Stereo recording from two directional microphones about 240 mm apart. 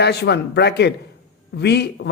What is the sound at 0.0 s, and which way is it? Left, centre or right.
A man's voice, left.